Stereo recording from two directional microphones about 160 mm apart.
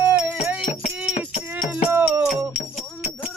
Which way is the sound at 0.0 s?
10° right (ahead or behind).